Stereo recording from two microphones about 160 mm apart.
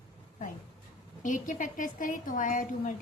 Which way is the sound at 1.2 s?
55° left (ahead or behind).